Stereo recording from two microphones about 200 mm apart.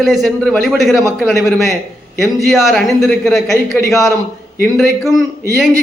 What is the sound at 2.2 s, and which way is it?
A man's voice, centre (ahead or behind).